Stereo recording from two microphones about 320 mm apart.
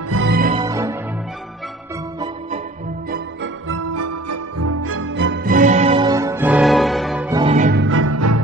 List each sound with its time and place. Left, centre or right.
0.1 s music: right
0.6 s music: centre
3.6 s music: right; by 7.4 s centre
7.4 s music: right